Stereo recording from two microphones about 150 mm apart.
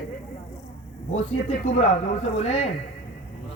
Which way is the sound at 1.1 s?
45° left (ahead or behind).